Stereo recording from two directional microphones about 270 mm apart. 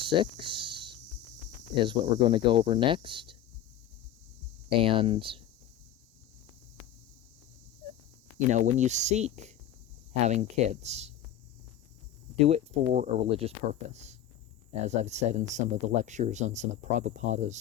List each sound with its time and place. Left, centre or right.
0.0 s a sound: centre
1.8 s speech: centre
4.8 s speech: centre
8.4 s speech: right
12.5 s speech: right